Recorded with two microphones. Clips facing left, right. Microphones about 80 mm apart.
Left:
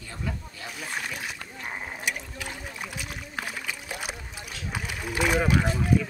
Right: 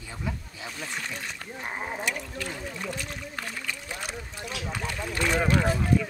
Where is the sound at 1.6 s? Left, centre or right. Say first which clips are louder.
Right 3 dB; centre.